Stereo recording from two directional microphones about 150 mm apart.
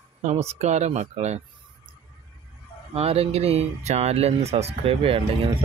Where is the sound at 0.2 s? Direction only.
50° right (ahead or behind).